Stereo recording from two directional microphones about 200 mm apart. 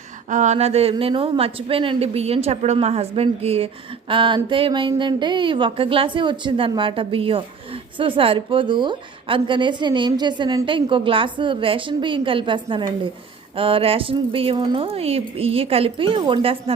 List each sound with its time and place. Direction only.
0.3 s a woman's voice: 35° right (ahead or behind)